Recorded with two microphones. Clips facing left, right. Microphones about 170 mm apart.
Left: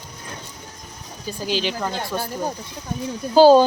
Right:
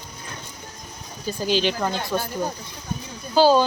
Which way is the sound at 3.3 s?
45° left (ahead or behind).